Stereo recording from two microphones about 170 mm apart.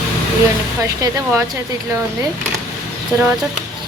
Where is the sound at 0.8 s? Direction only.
20° right (ahead or behind).